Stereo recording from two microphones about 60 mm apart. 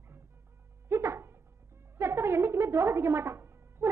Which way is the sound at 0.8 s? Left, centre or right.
Right.